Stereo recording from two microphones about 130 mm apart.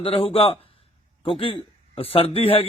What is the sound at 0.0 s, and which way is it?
A man's voice, 45° left (ahead or behind).